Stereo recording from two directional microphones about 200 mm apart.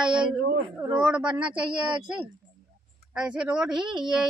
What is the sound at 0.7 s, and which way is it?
Speech, 20° right (ahead or behind).